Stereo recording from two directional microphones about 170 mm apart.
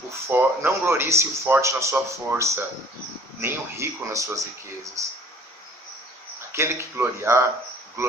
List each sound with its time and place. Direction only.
0.3 s speech: 15° right (ahead or behind)
6.5 s speech: 15° right (ahead or behind)
8.0 s insect: 15° right (ahead or behind)